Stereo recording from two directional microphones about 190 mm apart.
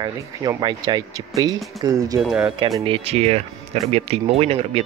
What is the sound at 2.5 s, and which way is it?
Speech, 20° right (ahead or behind).